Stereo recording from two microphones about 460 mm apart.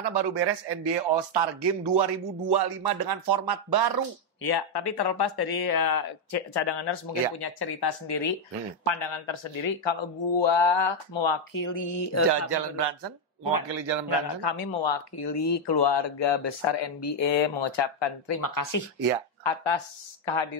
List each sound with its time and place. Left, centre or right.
0.1 s a man's voice: right
4.4 s speech: left
8.8 s speech: left
11.5 s a sound: left
12.3 s a man's voice: right
13.7 s a man's voice: right
14.4 s speech: left
18.4 s speech: left
19.4 s speech: left